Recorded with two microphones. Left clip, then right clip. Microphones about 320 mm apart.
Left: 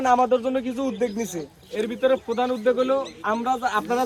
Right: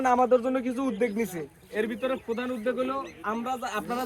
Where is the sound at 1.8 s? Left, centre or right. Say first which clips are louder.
Left 7 dB; centre.